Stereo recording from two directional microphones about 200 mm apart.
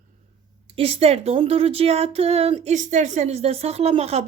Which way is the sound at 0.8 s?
30° right (ahead or behind).